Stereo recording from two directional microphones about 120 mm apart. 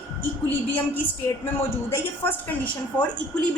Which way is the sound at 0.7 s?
15° left (ahead or behind).